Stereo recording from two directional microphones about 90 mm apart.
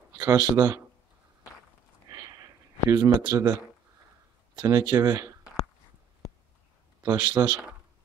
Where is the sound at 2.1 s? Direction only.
40° right (ahead or behind).